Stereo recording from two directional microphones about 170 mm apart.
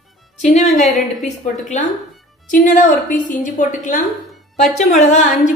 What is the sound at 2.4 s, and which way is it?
A woman's voice, 50° left (ahead or behind).